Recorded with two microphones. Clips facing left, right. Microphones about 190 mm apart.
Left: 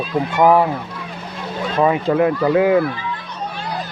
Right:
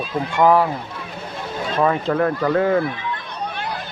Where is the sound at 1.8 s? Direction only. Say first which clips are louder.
Left 3 dB; 15° left (ahead or behind).